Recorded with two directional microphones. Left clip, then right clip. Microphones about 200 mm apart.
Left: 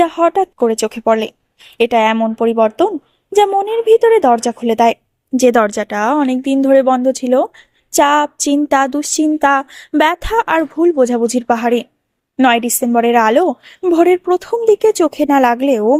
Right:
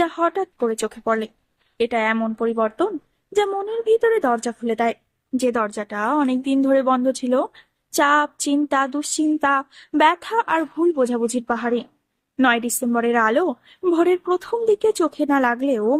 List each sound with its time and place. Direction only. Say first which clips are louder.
0.0 s speech: left 8 dB; 30° left (ahead or behind)